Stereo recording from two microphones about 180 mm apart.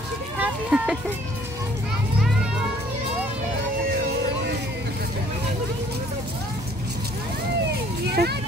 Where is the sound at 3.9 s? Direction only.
60° right (ahead or behind).